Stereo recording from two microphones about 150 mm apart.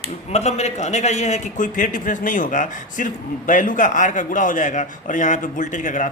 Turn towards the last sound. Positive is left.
turn(degrees=55)  # may be behind; listen again after turning